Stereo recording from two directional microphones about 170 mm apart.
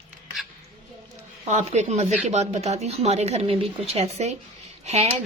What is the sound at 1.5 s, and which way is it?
A woman's voice, 45° right (ahead or behind).